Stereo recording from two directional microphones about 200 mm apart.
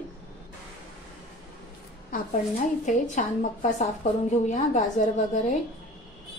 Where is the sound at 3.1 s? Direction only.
40° left (ahead or behind).